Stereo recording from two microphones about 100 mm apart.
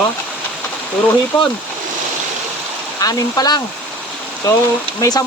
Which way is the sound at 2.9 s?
40° left (ahead or behind).